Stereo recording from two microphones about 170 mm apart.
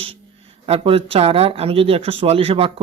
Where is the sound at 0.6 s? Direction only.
35° right (ahead or behind).